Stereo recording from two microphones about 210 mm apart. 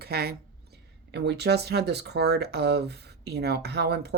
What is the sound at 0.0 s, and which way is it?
A woman's voice, 50° right (ahead or behind).